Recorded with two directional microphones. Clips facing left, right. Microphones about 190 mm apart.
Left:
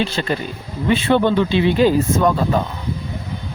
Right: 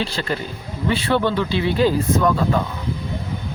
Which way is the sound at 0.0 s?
20° left (ahead or behind).